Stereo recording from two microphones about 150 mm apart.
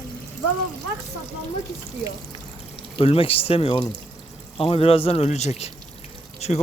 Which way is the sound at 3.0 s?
40° left (ahead or behind).